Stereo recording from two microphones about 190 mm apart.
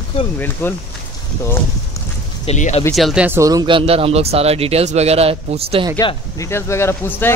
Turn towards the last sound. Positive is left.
turn(degrees=15)  # may be behind; listen again after turning